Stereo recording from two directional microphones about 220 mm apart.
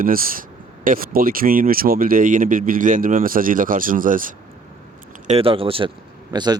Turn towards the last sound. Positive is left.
turn(degrees=-20)  # may be behind; listen again after turning